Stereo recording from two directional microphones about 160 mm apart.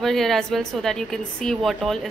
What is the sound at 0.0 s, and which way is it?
A woman's voice, centre (ahead or behind).